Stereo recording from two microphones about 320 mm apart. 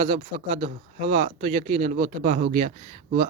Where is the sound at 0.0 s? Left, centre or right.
Right.